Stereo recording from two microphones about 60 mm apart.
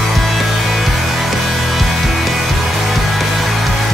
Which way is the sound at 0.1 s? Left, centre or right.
Centre.